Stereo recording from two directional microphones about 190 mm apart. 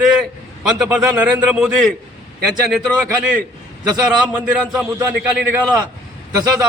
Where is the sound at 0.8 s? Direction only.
5° right (ahead or behind).